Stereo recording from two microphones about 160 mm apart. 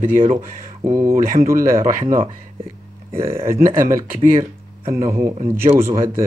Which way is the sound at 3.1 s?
15° right (ahead or behind).